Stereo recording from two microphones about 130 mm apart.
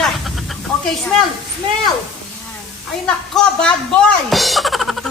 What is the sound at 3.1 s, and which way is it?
A woman's voice, 5° left (ahead or behind).